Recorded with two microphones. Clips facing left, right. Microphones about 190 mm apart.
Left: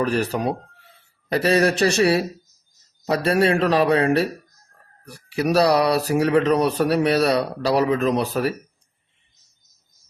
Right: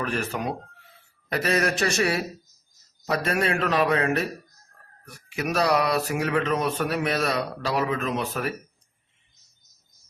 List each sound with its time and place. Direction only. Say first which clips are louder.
0.0 s speech: left 7 dB; 35° left (ahead or behind)
3.2 s speech: left 8 dB; 35° left (ahead or behind)